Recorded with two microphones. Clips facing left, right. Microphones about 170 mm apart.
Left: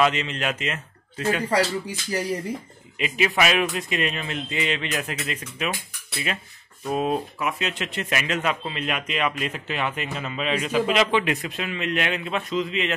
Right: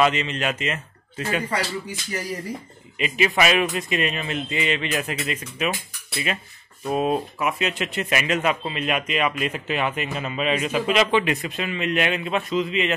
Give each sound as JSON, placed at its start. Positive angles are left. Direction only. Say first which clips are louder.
{"t": 0.0, "sound": "a man's voice", "louder": "right 1 dB", "side_deg": 0}
{"t": 1.4, "sound": "speech", "louder": "left 4 dB", "side_deg": 35}
{"t": 3.0, "sound": "speech", "louder": "right 1 dB", "side_deg": 0}
{"t": 6.9, "sound": "speech", "louder": "right 2 dB", "side_deg": -5}